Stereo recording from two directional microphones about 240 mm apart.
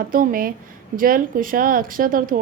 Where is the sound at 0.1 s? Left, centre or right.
Right.